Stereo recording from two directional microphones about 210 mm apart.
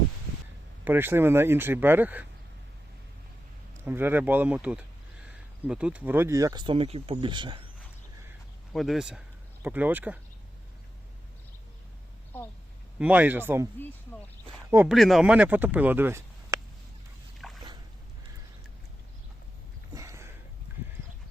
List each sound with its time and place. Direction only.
0.9 s speech: 10° right (ahead or behind)
3.8 s speech: 10° right (ahead or behind)
8.7 s speech: centre (ahead or behind)
13.0 s speech: 5° right (ahead or behind)
14.7 s speech: 10° right (ahead or behind)
14.9 s speech: centre (ahead or behind)
17.4 s boat: centre (ahead or behind)
19.9 s a sound: 15° right (ahead or behind)